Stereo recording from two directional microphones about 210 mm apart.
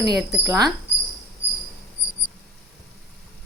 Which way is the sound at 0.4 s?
15° right (ahead or behind).